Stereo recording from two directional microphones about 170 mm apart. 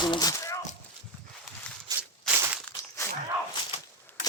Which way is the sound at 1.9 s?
20° right (ahead or behind).